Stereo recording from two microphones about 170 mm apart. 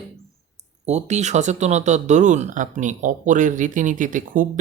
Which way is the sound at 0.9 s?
40° right (ahead or behind).